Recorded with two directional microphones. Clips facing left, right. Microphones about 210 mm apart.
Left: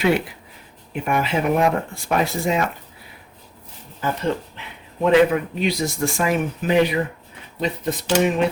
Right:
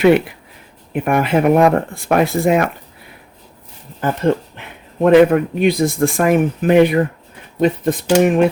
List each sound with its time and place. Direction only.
0.9 s speech: 55° right (ahead or behind)
4.0 s speech: 50° right (ahead or behind)